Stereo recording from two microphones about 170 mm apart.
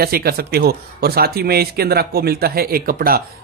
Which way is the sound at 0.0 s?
65° right (ahead or behind).